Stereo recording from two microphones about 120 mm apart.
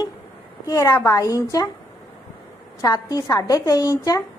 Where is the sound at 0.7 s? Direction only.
25° left (ahead or behind).